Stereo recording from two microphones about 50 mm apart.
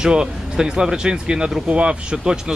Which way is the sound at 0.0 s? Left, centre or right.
Centre.